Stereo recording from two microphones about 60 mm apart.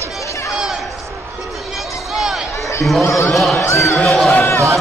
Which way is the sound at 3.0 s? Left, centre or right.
Left.